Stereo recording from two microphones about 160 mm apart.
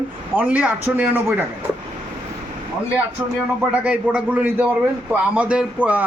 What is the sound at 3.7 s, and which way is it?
A man's voice, 10° right (ahead or behind).